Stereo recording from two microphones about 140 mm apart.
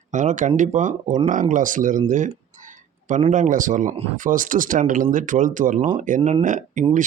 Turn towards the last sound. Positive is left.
turn(degrees=-65)  # may be behind; listen again after turning